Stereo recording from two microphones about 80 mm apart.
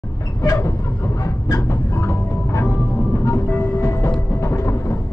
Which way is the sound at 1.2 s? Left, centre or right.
Left.